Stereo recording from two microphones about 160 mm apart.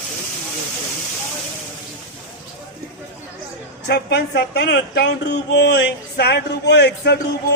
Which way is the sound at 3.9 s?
90° left.